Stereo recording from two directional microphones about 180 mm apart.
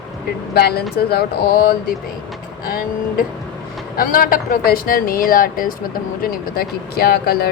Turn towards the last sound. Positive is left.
turn(degrees=60)  # may be behind; listen again after turning